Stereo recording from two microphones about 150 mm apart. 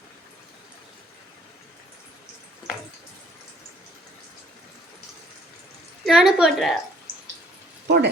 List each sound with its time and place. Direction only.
6.1 s a woman's voice: 5° right (ahead or behind)
7.9 s speech: 90° right